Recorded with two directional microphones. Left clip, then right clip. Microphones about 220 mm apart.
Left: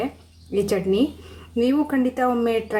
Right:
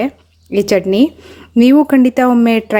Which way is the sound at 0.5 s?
40° right (ahead or behind).